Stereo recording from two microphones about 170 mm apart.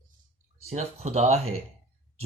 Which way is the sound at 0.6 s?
40° right (ahead or behind).